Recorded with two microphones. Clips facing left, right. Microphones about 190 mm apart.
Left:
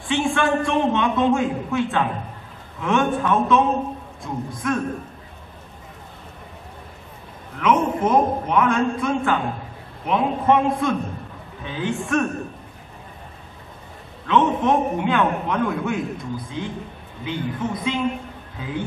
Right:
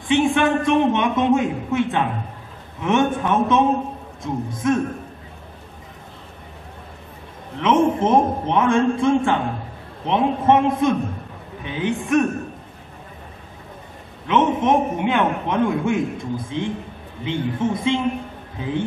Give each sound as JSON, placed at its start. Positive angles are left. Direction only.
{"t": 0.1, "sound": "a man's voice", "side_deg": -20}
{"t": 7.5, "sound": "a man's voice", "side_deg": -25}
{"t": 14.2, "sound": "a man's voice", "side_deg": -20}